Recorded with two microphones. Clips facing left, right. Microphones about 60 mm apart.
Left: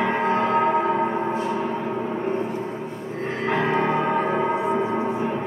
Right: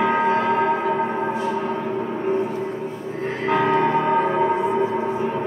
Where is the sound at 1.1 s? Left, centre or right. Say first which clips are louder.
Right 1 dB; centre.